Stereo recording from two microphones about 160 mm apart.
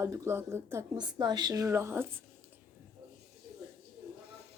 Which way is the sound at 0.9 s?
25° right (ahead or behind).